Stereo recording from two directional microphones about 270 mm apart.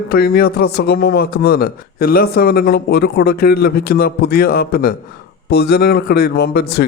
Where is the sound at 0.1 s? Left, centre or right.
Left.